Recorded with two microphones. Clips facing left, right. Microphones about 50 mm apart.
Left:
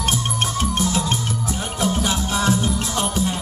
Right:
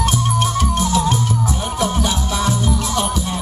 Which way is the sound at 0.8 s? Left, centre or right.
Left.